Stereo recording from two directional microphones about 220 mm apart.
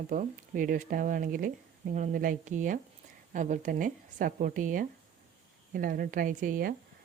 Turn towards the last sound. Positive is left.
turn(degrees=-40)  # may be behind; listen again after turning